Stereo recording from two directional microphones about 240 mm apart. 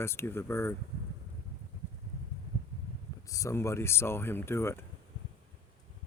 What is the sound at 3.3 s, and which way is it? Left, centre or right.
Speech, centre.